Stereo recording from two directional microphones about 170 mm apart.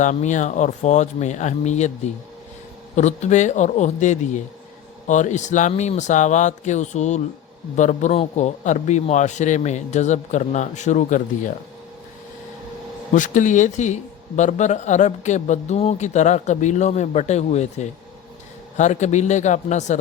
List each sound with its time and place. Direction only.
0.0 s a man's voice: 45° left (ahead or behind)
2.9 s a man's voice: 45° left (ahead or behind)
13.1 s a man's voice: 50° left (ahead or behind)